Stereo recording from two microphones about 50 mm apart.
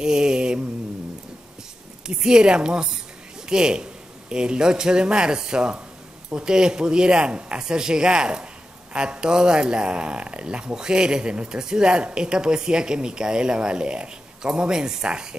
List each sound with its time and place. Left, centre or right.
0.0 s mantra: centre
2.0 s a man's voice: centre